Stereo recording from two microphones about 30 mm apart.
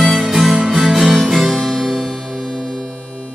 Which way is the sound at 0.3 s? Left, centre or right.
Centre.